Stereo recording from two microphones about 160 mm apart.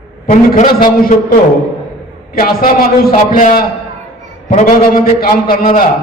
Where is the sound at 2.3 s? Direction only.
65° left (ahead or behind).